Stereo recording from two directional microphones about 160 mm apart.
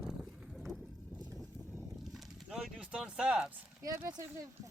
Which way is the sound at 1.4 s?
Centre (ahead or behind).